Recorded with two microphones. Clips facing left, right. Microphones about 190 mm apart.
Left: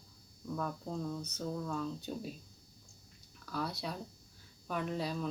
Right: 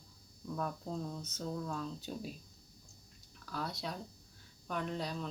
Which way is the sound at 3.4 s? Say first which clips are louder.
Left 2 dB; centre (ahead or behind).